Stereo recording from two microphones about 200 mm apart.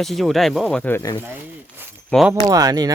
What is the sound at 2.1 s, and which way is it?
Speech, centre (ahead or behind).